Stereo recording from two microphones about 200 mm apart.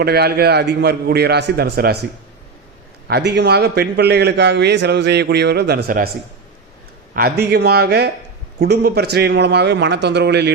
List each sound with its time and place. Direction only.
0.0 s a man's voice: 50° right (ahead or behind)
3.1 s a man's voice: 55° right (ahead or behind)
7.2 s a man's voice: 50° right (ahead or behind)